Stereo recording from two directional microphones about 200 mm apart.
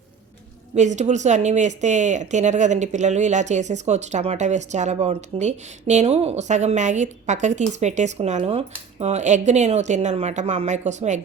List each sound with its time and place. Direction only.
0.8 s speech: 35° right (ahead or behind)